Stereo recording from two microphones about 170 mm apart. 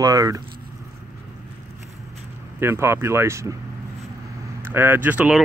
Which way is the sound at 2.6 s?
15° right (ahead or behind).